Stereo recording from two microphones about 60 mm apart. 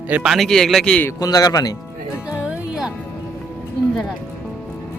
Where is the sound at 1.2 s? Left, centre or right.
Left.